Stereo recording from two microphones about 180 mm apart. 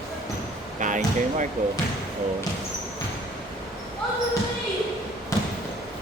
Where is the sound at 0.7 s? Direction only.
45° right (ahead or behind).